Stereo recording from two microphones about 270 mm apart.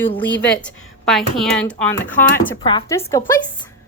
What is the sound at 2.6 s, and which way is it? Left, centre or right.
Speech, centre.